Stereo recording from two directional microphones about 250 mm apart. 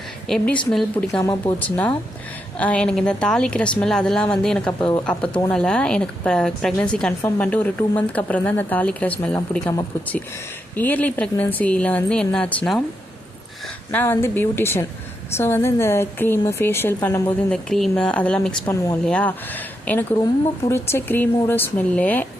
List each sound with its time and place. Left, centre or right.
0.3 s a woman's voice: centre
13.9 s a woman's voice: centre